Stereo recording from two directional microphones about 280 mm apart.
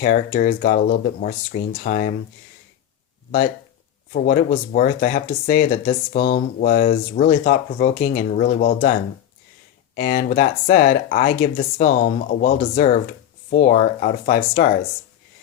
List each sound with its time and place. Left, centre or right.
0.0 s speech: left
4.1 s speech: left
9.9 s speech: left